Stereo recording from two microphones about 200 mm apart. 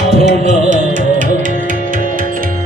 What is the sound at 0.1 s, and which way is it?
Music, 35° right (ahead or behind).